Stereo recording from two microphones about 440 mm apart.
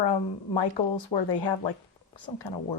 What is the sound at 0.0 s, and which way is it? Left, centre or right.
Speech, left.